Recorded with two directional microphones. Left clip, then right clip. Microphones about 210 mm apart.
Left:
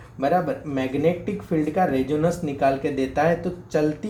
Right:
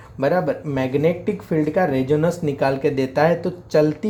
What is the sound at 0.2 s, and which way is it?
Speech, 50° right (ahead or behind).